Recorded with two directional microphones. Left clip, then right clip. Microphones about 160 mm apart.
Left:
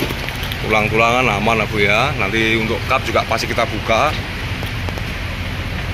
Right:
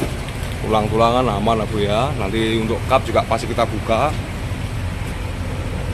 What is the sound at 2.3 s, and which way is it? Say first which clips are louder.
Speech: left 3 dB; 20° right (ahead or behind).